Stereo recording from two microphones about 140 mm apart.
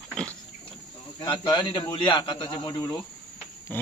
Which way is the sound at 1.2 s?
35° left (ahead or behind).